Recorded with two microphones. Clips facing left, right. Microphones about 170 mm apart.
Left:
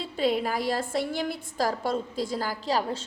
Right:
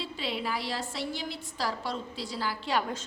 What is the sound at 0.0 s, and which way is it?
A woman's voice, 45° left (ahead or behind).